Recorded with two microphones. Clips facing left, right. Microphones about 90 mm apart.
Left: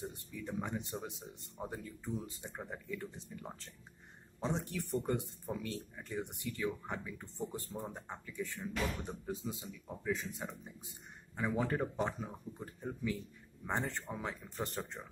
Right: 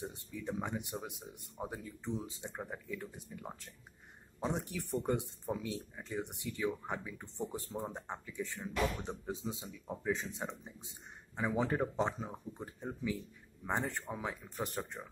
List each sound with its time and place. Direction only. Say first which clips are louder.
0.0 s speech: right 2 dB; 20° right (ahead or behind)
2.5 s speech: left 1 dB; 10° right (ahead or behind)